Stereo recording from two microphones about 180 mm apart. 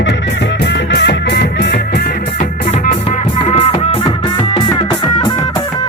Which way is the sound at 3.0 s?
30° left (ahead or behind).